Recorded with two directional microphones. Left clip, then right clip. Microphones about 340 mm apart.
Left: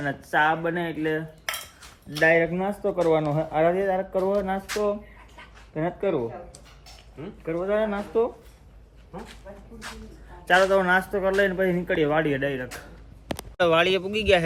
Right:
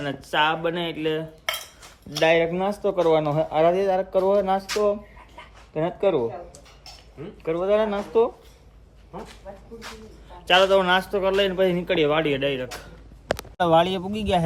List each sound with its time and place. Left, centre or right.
0.0 s speech: centre
1.5 s cutlery: right
2.1 s speech: centre
5.4 s a sound: centre
7.4 s speech: centre
9.1 s speech: right
10.4 s speech: centre
14.1 s a man's voice: right